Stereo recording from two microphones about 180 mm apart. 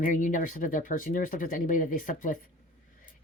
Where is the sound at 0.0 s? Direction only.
45° left (ahead or behind).